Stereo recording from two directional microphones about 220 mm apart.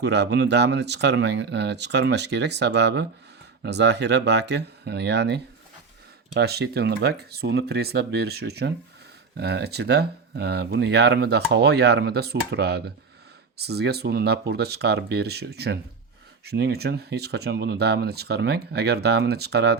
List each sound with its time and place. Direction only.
0.0 s speech: 50° right (ahead or behind)